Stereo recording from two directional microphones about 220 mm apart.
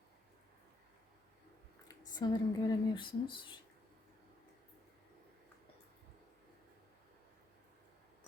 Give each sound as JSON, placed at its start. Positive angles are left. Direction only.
{"t": 1.9, "sound": "speech", "side_deg": 20}